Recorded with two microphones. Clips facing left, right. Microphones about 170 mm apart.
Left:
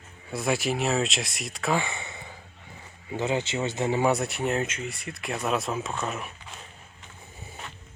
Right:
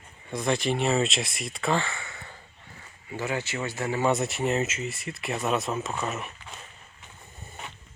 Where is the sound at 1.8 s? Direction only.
20° left (ahead or behind).